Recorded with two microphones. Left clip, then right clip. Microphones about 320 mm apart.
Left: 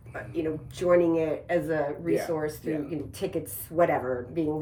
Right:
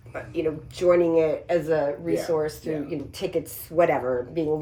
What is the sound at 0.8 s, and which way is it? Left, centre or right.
Speech, centre.